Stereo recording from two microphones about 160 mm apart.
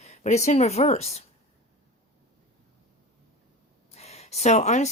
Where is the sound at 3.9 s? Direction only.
40° left (ahead or behind).